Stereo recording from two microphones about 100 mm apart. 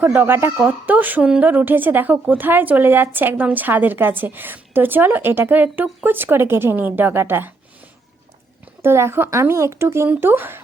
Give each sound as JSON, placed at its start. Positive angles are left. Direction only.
{"t": 0.1, "sound": "a woman's voice", "side_deg": -20}
{"t": 8.8, "sound": "a woman's voice", "side_deg": -25}